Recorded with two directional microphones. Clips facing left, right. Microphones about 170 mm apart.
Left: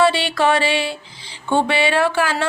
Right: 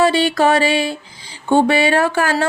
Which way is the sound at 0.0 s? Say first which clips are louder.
Right 2 dB; 40° right (ahead or behind).